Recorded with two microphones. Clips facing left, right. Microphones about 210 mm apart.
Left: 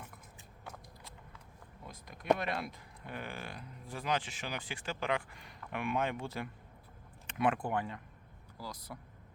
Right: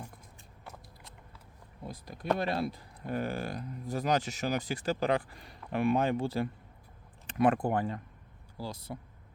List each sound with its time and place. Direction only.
0.6 s a sound: centre (ahead or behind)
1.8 s speech: 35° right (ahead or behind)
8.5 s speech: 25° right (ahead or behind)